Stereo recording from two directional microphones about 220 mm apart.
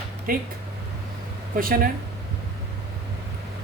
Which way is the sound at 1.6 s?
40° right (ahead or behind).